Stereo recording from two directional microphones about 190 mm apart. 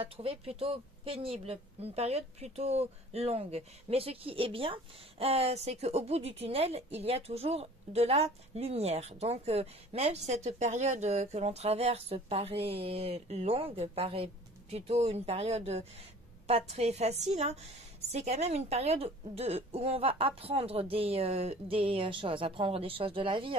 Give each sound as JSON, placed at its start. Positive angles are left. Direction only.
{"t": 0.0, "sound": "a woman's voice", "side_deg": -30}